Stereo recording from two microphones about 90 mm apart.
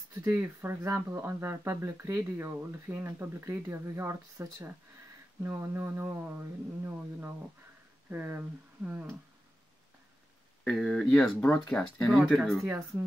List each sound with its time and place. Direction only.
0.1 s speech: 30° right (ahead or behind)
10.6 s speech: 5° left (ahead or behind)
11.2 s speech: 30° left (ahead or behind)
12.3 s speech: centre (ahead or behind)
12.6 s speech: 25° right (ahead or behind)